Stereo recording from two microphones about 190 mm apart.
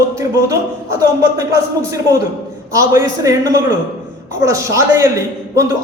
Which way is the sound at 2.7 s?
15° right (ahead or behind).